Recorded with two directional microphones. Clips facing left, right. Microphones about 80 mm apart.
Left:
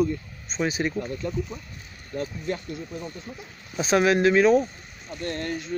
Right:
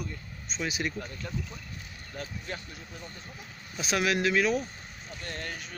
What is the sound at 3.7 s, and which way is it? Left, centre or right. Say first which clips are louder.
Speech: left 8 dB; left.